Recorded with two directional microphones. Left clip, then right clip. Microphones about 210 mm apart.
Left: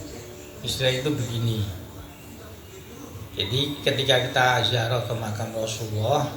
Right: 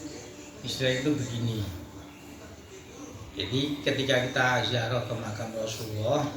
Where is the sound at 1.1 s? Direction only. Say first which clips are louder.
Left 2 dB; 50° left (ahead or behind).